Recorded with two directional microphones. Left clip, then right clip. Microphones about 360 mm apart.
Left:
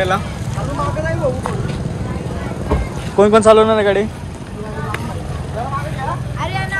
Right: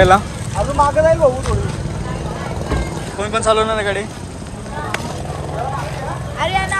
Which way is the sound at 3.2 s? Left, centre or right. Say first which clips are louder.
Left 7 dB; centre.